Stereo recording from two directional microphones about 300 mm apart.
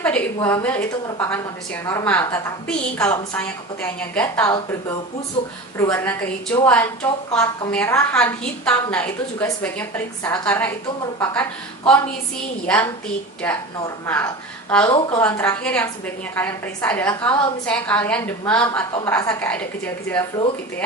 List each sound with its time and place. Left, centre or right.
0.0 s a woman's voice: centre
5.8 s a woman's voice: centre